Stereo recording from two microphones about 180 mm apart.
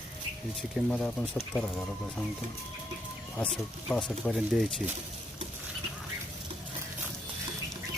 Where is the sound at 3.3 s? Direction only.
5° left (ahead or behind).